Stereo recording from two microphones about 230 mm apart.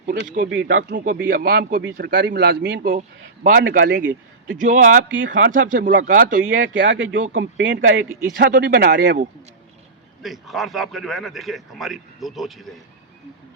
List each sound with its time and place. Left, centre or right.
0.1 s a man's voice: right
1.3 s a man's voice: right
3.8 s a man's voice: right
4.5 s speech: right
5.1 s speech: right
5.5 s speech: right
6.7 s speech: right
8.4 s a man's voice: right
10.2 s a man's voice: centre